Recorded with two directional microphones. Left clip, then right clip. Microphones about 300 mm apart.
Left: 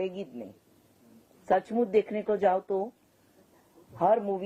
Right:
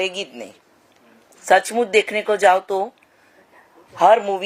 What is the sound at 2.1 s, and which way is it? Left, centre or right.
Speech, centre.